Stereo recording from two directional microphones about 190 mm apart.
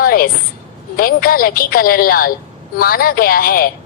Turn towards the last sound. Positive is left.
turn(degrees=50)  # may be behind; listen again after turning